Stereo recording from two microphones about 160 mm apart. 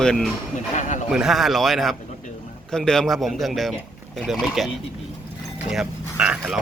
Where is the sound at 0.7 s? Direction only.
50° left (ahead or behind).